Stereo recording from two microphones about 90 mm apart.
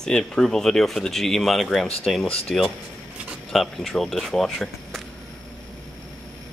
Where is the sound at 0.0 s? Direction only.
5° left (ahead or behind).